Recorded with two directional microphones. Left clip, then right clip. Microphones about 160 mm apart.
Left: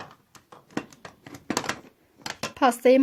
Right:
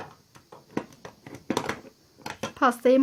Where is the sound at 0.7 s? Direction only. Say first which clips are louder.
Even; 20° left (ahead or behind).